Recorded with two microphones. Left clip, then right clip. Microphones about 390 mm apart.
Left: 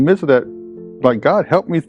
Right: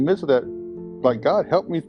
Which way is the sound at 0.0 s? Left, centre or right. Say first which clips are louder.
Left 6 dB; left.